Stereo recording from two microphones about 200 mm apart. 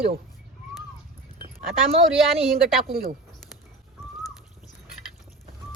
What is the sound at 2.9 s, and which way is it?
Speech, 45° right (ahead or behind).